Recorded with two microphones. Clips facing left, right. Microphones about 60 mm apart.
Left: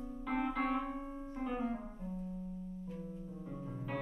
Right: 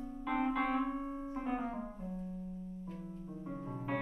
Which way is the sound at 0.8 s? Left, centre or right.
Right.